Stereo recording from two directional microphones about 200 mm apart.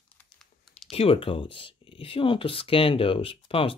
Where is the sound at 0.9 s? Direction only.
25° left (ahead or behind).